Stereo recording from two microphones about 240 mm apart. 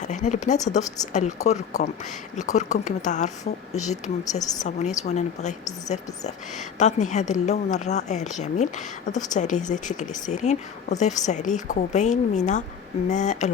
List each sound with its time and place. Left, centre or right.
0.0 s speech: left
1.4 s a woman's voice: centre
2.3 s speech: left
4.2 s a woman's voice: centre
4.6 s speech: left